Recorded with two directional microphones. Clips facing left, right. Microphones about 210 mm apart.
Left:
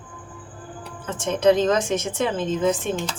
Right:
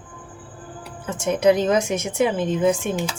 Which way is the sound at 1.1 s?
10° right (ahead or behind).